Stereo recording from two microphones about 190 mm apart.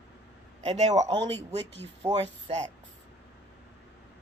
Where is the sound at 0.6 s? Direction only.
35° right (ahead or behind).